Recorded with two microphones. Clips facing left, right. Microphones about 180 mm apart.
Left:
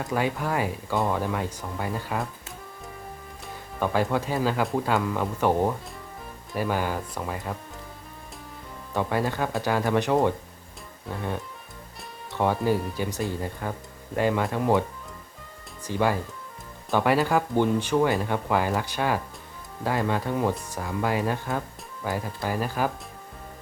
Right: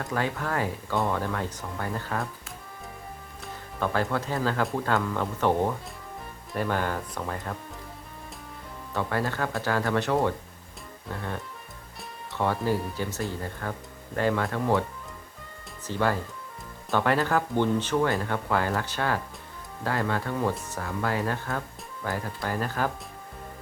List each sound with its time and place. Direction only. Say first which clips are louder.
0.0 s speech: left 3 dB; 15° left (ahead or behind)
3.8 s speech: left 3 dB; 15° left (ahead or behind)
8.9 s speech: left 3 dB; 15° left (ahead or behind)
12.3 s speech: left 3 dB; 15° left (ahead or behind)
15.9 s speech: left 2 dB; 15° left (ahead or behind)